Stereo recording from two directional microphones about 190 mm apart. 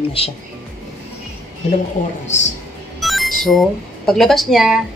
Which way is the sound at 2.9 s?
Centre (ahead or behind).